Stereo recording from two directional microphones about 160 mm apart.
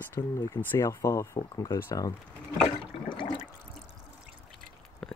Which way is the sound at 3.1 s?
30° left (ahead or behind).